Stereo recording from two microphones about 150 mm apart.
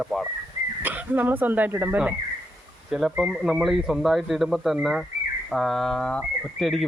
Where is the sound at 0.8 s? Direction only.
10° right (ahead or behind).